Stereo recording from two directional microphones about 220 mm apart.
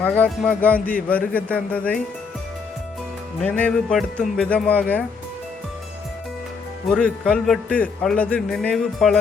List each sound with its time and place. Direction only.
0.0 s speech: 5° left (ahead or behind)
3.4 s speech: 5° left (ahead or behind)
6.9 s a man's voice: 5° left (ahead or behind)